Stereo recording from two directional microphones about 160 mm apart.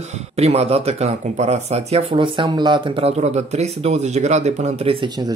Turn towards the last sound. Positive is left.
turn(degrees=-25)  # may be behind; listen again after turning